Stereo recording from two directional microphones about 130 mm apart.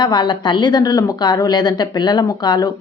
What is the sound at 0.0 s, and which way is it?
Speech, 35° left (ahead or behind).